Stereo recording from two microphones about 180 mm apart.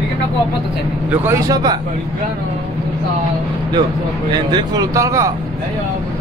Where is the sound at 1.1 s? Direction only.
15° right (ahead or behind).